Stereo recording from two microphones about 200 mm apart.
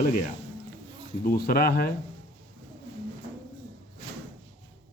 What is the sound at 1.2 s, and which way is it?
Speech, 50° left (ahead or behind).